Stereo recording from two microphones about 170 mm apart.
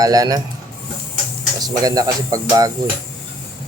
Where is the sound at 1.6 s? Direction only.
20° right (ahead or behind).